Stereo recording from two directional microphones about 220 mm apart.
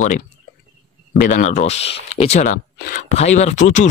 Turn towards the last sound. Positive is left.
turn(degrees=35)  # may be behind; listen again after turning